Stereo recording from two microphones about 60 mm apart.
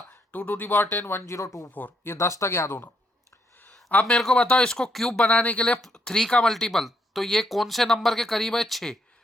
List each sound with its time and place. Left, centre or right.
0.1 s speech: left
4.0 s speech: centre
5.3 s speech: left
5.8 s speech: centre